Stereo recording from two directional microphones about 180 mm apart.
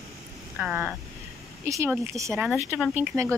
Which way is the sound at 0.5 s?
5° right (ahead or behind).